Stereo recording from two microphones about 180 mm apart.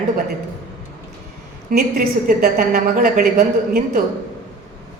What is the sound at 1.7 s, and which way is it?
A woman's voice, 55° right (ahead or behind).